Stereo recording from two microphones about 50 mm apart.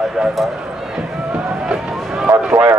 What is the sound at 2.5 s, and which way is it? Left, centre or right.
Speech, right.